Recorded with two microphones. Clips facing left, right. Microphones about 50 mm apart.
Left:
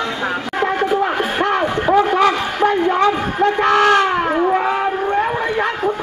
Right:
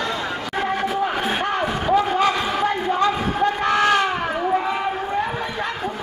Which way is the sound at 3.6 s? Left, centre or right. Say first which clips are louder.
Left 6 dB; left.